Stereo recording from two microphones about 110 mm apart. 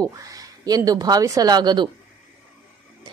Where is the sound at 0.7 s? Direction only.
35° right (ahead or behind).